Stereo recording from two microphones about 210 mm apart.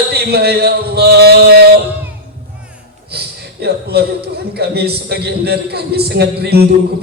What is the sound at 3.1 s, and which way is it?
A man's voice, 50° right (ahead or behind).